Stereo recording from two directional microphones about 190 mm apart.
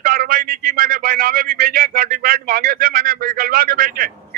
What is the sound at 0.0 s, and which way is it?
Speech, 50° right (ahead or behind).